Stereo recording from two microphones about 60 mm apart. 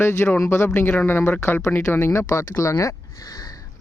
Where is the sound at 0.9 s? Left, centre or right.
Left.